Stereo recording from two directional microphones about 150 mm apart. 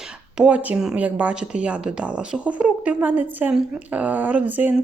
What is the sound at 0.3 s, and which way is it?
Speech, 5° right (ahead or behind).